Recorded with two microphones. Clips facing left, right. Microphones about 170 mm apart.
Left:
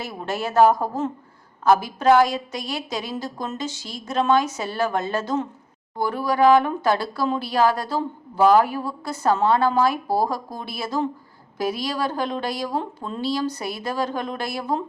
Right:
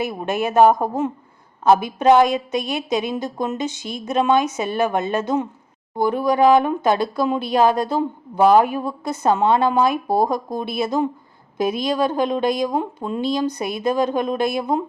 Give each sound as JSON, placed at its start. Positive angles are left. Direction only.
{"t": 0.0, "sound": "speech", "side_deg": -20}